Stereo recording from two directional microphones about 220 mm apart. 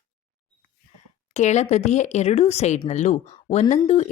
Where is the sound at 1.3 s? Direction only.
30° left (ahead or behind).